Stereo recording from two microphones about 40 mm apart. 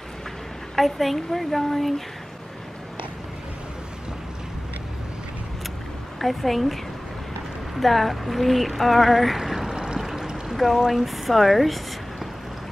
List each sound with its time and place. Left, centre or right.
0.7 s speech: centre
6.1 s speech: centre
7.8 s speech: centre
9.6 s pour: centre
9.9 s a sound: centre
10.8 s speech: centre